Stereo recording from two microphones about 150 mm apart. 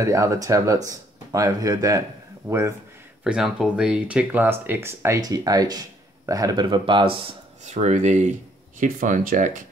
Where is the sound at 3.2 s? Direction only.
5° right (ahead or behind); by 7.3 s 35° right (ahead or behind).